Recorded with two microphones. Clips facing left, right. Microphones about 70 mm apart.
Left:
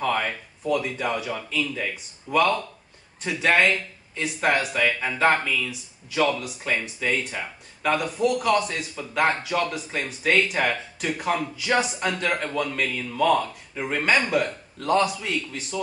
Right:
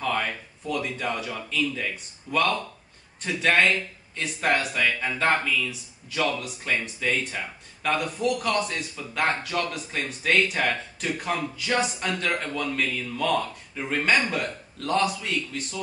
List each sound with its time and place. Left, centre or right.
0.0 s speech: centre